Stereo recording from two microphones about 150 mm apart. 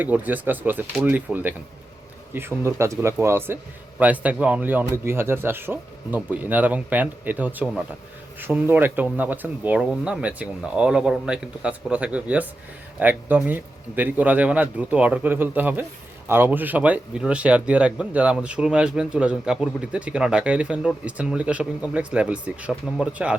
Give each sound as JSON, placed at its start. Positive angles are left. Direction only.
{"t": 0.0, "sound": "speech", "side_deg": -10}